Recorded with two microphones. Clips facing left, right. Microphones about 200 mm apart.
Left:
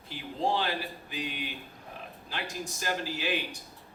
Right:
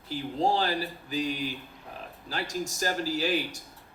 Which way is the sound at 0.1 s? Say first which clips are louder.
Right 3 dB; 40° right (ahead or behind).